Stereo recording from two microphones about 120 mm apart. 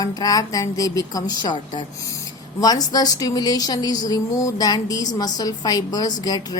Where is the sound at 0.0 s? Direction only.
30° left (ahead or behind).